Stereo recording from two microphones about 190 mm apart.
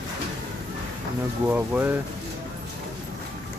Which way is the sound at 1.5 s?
10° right (ahead or behind).